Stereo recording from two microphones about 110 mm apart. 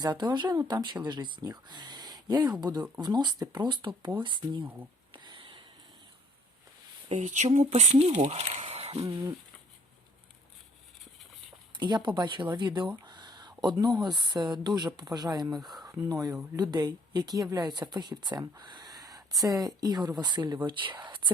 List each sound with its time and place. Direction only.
0.0 s speech: 40° right (ahead or behind)
5.1 s a sound: 45° right (ahead or behind)
7.1 s speech: 85° right; by 9.0 s 70° right (ahead or behind)
11.8 s speech: 45° right (ahead or behind)
15.5 s speech: centre (ahead or behind)
15.9 s speech: 30° right (ahead or behind); by 21.3 s 45° right (ahead or behind)